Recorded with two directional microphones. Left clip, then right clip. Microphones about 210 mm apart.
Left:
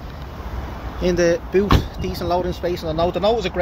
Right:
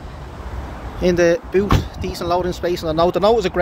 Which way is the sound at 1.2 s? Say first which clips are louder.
Right 1 dB; 15° right (ahead or behind).